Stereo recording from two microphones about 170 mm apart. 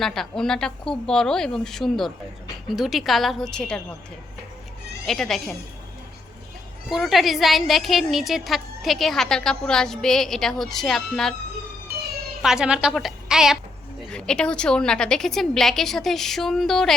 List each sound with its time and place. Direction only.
0.0 s a woman's voice: centre (ahead or behind)
5.0 s a woman's voice: centre (ahead or behind)
6.9 s a woman's voice: centre (ahead or behind)
12.4 s a woman's voice: 5° right (ahead or behind)